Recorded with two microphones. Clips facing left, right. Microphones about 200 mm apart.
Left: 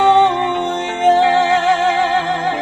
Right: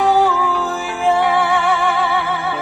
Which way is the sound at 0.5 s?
30° left (ahead or behind).